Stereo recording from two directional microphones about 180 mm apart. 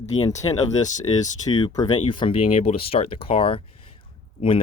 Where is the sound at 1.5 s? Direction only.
20° left (ahead or behind).